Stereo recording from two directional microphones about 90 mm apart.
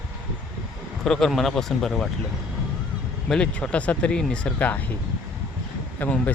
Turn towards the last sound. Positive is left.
turn(degrees=20)  # may be behind; listen again after turning